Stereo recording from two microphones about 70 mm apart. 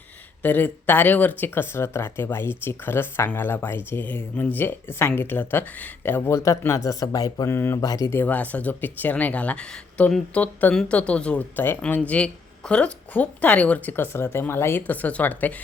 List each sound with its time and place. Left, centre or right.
0.4 s speech: left
7.4 s speech: left
7.8 s speech: left
8.1 s speech: left
14.8 s speech: left